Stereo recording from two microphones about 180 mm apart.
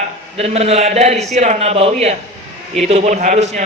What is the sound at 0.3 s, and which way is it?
A man's voice, 35° right (ahead or behind).